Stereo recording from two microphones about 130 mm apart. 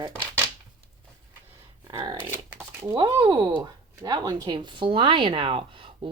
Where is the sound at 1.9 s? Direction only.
35° right (ahead or behind).